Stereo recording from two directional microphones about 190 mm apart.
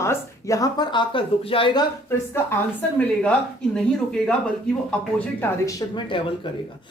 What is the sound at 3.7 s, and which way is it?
Speech, 5° left (ahead or behind).